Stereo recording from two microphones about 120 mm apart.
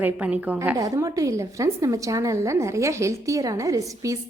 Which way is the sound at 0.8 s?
30° right (ahead or behind).